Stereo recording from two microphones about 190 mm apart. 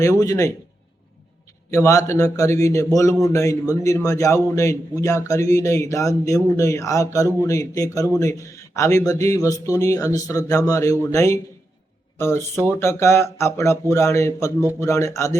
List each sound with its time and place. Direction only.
0.0 s speech: 20° left (ahead or behind)
1.7 s speech: 15° left (ahead or behind)